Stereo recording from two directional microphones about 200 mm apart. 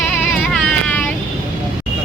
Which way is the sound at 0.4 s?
5° left (ahead or behind).